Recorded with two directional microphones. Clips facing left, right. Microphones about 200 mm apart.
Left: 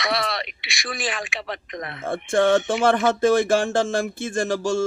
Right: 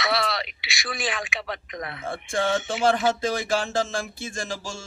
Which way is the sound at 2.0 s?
50° left (ahead or behind).